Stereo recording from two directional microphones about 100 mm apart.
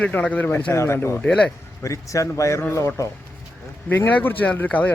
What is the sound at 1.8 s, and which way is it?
Speech, 30° left (ahead or behind).